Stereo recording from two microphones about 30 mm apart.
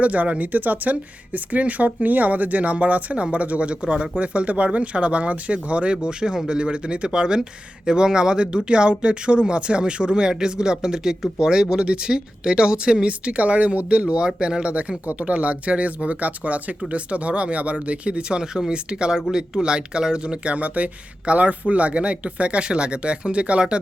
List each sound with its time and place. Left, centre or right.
0.0 s speech: right
13.1 s speech: right
15.2 s speech: right
18.3 s speech: right
20.5 s speech: right